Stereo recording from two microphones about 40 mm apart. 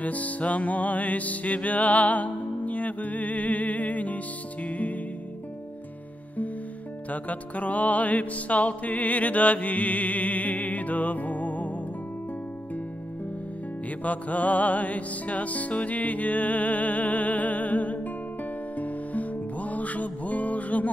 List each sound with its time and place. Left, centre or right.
0.0 s music: left
7.1 s music: left
14.0 s music: left